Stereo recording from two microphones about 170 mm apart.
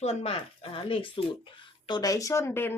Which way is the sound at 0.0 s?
40° left (ahead or behind).